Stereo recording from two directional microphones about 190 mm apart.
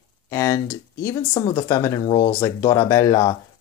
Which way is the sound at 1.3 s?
25° left (ahead or behind).